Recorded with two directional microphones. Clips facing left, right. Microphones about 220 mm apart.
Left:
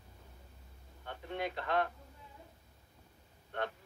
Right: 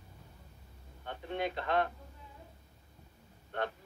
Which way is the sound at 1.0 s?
25° right (ahead or behind).